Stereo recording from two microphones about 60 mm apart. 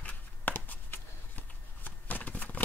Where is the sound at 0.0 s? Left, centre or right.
Left.